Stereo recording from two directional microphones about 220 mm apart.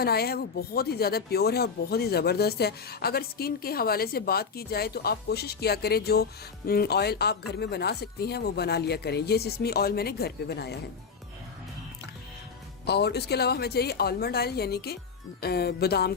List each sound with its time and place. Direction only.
0.0 s speech: 45° left (ahead or behind)
12.8 s speech: 50° left (ahead or behind)